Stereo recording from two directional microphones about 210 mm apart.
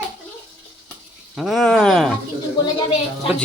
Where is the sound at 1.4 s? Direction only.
Centre (ahead or behind).